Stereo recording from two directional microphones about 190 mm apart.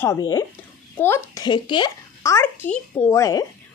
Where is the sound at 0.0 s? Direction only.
20° left (ahead or behind).